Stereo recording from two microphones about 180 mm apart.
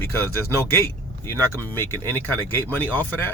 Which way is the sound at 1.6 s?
10° left (ahead or behind).